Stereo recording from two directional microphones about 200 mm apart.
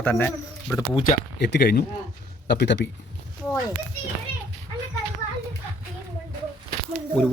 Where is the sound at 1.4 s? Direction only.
55° left (ahead or behind).